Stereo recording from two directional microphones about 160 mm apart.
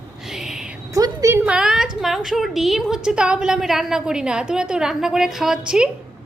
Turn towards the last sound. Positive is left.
turn(degrees=-5)  # may be behind; listen again after turning